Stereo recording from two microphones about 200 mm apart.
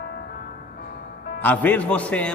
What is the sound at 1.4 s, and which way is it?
Speech, 10° left (ahead or behind).